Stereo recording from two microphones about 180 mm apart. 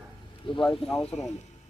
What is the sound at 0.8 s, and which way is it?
Speech, 5° left (ahead or behind).